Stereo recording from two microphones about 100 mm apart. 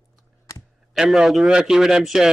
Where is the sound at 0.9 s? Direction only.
5° right (ahead or behind).